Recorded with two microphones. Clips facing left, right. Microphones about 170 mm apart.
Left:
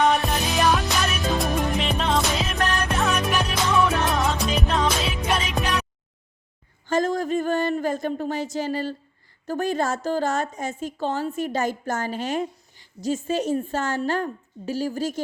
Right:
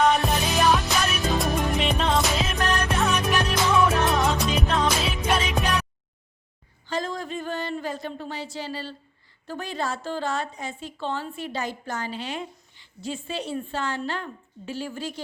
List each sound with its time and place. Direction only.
0.0 s music: centre (ahead or behind)
6.8 s a woman's voice: 45° left (ahead or behind)